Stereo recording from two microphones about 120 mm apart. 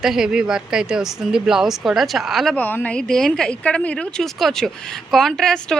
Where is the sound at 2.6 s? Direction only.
15° left (ahead or behind).